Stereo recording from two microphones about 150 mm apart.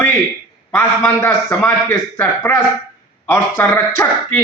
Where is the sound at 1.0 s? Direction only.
15° left (ahead or behind).